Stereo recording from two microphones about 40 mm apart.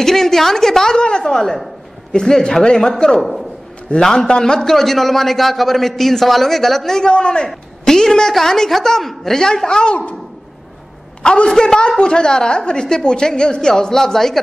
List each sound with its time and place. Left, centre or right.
0.0 s a woman's voice: centre
7.0 s a man's voice: left
11.5 s a woman's voice: centre